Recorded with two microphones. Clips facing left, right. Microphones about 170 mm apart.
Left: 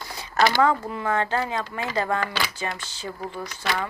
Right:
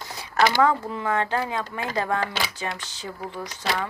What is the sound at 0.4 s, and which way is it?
Speech, 15° right (ahead or behind).